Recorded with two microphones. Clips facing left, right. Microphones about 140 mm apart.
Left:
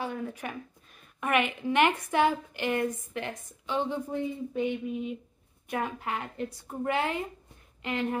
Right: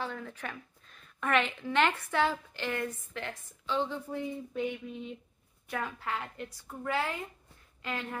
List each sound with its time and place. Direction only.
0.0 s a woman's voice: 15° left (ahead or behind)
6.3 s a woman's voice: 35° left (ahead or behind)
6.9 s speech: 20° left (ahead or behind)